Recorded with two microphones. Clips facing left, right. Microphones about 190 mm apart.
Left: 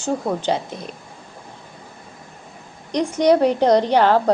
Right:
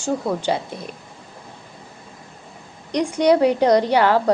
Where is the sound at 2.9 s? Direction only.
15° right (ahead or behind).